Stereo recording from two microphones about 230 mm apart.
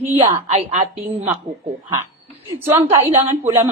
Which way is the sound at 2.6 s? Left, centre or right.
Centre.